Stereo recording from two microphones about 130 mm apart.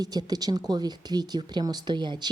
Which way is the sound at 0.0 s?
30° right (ahead or behind).